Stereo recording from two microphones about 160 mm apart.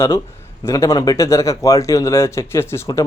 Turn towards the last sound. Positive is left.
turn(degrees=15)  # may be behind; listen again after turning